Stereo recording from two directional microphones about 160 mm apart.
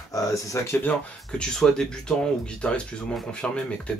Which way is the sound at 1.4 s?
5° left (ahead or behind).